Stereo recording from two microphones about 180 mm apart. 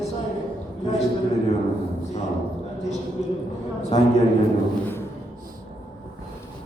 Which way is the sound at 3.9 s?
35° left (ahead or behind).